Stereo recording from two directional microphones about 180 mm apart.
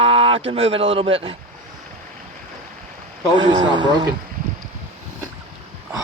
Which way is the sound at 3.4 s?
25° right (ahead or behind).